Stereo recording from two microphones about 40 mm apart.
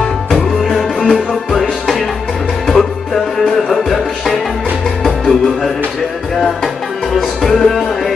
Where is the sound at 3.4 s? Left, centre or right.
Centre.